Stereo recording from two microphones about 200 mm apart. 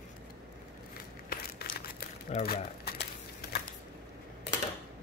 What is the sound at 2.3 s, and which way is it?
Speech, 35° left (ahead or behind).